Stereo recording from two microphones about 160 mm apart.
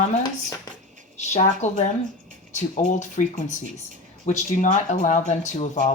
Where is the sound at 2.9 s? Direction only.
50° left (ahead or behind).